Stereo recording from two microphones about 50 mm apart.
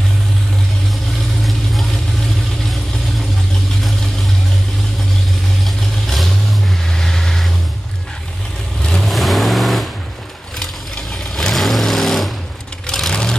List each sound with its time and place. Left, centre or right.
1.4 s vehicle: centre
6.0 s vehicle: centre
8.8 s vehicle: centre
9.1 s vehicle: centre
11.3 s vehicle: centre
13.1 s vehicle: centre